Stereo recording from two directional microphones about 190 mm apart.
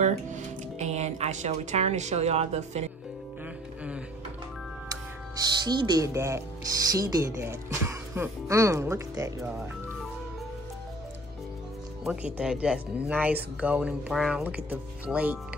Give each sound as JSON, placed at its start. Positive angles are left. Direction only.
{"t": 0.0, "sound": "speech", "side_deg": -40}
{"t": 5.4, "sound": "speech", "side_deg": -20}
{"t": 12.0, "sound": "speech", "side_deg": -10}